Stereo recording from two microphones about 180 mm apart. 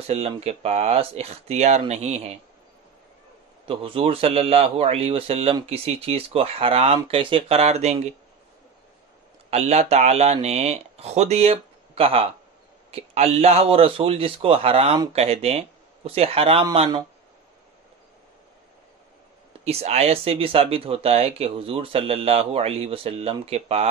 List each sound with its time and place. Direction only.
0.0 s speech: 35° right (ahead or behind)
3.6 s speech: 30° right (ahead or behind)
9.5 s speech: 35° right (ahead or behind)
19.6 s speech: 35° right (ahead or behind)